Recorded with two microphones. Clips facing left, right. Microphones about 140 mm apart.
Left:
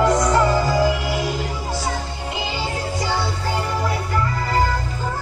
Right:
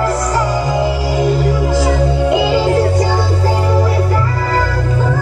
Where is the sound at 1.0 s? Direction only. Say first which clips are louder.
Right 7 dB; 40° right (ahead or behind).